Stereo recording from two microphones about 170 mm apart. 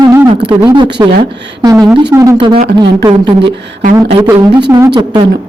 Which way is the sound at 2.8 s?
30° right (ahead or behind).